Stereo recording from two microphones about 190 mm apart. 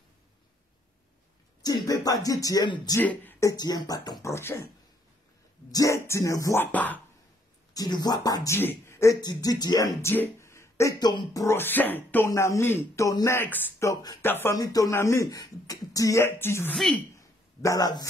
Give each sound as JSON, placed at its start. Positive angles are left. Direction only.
{"t": 1.6, "sound": "speech", "side_deg": 20}
{"t": 3.0, "sound": "speech", "side_deg": 10}
{"t": 5.7, "sound": "speech", "side_deg": 15}
{"t": 7.7, "sound": "speech", "side_deg": 20}
{"t": 16.7, "sound": "speech", "side_deg": 0}
{"t": 17.6, "sound": "speech", "side_deg": 20}